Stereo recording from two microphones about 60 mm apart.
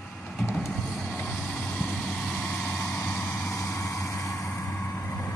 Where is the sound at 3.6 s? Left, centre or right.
Left.